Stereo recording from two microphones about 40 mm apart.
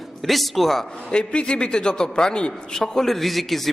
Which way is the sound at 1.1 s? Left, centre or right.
Left.